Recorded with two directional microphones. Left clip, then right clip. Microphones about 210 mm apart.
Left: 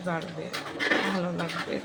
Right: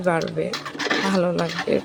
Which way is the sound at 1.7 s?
30° right (ahead or behind).